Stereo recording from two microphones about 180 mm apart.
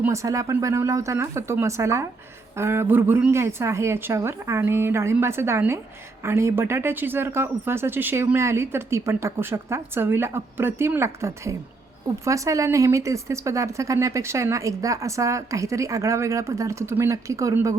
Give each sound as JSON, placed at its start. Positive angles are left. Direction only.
{"t": 0.0, "sound": "a woman's voice", "side_deg": -15}